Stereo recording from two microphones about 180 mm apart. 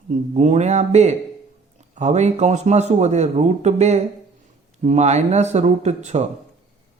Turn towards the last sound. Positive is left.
turn(degrees=-40)  # may be behind; listen again after turning